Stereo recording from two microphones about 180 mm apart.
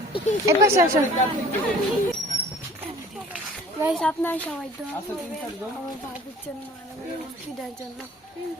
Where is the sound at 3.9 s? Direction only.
5° left (ahead or behind).